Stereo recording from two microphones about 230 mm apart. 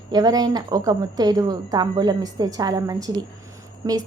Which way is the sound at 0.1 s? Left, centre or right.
Centre.